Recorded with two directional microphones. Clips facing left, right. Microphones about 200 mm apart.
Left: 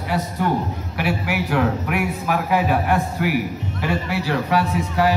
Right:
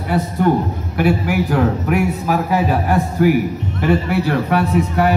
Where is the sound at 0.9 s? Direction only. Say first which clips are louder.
Right 7 dB; 45° right (ahead or behind).